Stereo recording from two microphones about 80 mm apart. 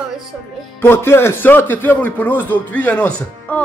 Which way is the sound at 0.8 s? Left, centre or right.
Left.